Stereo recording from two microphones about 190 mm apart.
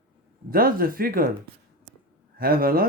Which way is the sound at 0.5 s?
50° right (ahead or behind).